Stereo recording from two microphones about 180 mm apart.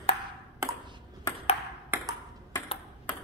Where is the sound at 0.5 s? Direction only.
20° right (ahead or behind).